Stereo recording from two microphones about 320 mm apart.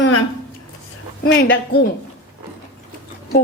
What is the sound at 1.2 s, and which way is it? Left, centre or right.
Speech, left.